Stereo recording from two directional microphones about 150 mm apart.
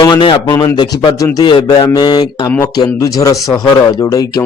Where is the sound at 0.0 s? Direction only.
30° left (ahead or behind).